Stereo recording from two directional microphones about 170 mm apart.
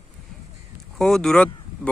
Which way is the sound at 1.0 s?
5° left (ahead or behind).